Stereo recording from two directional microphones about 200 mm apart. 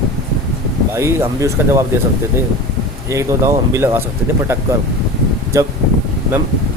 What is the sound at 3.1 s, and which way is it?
Speech, 15° right (ahead or behind).